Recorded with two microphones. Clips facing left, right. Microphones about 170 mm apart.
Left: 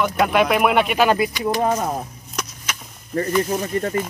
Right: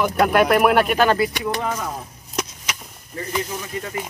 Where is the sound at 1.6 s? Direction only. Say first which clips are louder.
Left 6 dB; 45° left (ahead or behind).